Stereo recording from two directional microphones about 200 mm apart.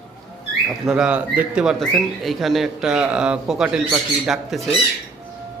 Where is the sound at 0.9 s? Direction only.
5° right (ahead or behind).